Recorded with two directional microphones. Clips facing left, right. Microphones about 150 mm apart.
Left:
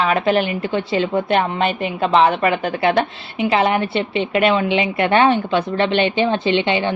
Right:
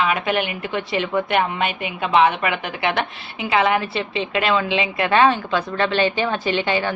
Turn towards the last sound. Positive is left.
turn(degrees=20)  # may be behind; listen again after turning